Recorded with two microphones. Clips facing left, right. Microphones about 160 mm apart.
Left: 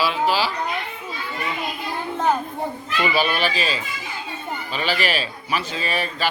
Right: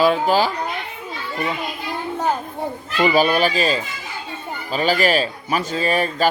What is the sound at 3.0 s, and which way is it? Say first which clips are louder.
A child's voice: right 6 dB; 40° right (ahead or behind).